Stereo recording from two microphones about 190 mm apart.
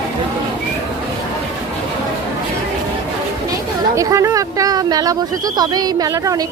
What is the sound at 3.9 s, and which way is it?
Speech, 15° right (ahead or behind).